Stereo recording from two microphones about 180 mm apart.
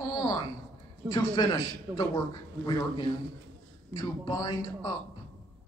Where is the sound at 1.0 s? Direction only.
20° left (ahead or behind).